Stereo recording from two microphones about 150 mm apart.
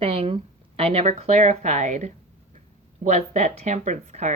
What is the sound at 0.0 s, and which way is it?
Speech, 40° right (ahead or behind).